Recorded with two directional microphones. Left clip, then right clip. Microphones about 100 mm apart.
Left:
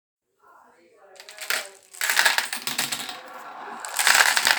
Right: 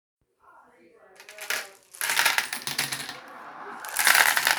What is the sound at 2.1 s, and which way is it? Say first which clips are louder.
Typing: left 2 dB; centre (ahead or behind).